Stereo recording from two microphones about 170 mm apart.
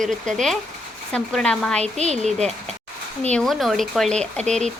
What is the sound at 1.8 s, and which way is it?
Speech, 40° right (ahead or behind).